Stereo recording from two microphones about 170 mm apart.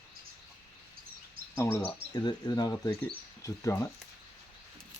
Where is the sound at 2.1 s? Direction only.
25° left (ahead or behind).